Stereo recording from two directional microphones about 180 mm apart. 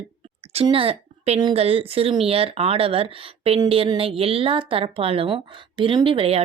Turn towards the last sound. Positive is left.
turn(degrees=-30)  # may be behind; listen again after turning